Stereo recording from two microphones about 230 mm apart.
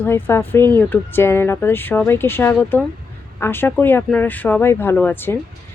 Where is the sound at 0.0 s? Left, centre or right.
Centre.